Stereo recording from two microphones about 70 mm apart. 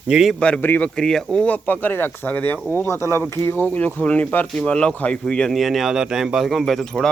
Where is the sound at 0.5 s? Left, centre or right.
Left.